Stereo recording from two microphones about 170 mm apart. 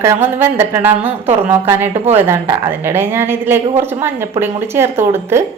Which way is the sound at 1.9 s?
40° right (ahead or behind).